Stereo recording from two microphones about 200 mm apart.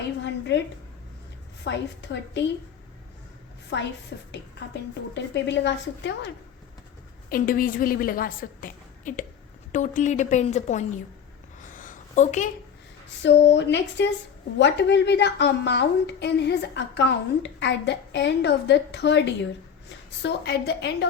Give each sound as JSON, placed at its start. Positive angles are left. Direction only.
{"t": 0.2, "sound": "a sound", "side_deg": 60}
{"t": 1.6, "sound": "a woman's voice", "side_deg": 60}
{"t": 3.7, "sound": "a woman's voice", "side_deg": 60}
{"t": 7.3, "sound": "a woman's voice", "side_deg": 45}
{"t": 11.6, "sound": "a sound", "side_deg": 40}
{"t": 13.2, "sound": "a woman's voice", "side_deg": 60}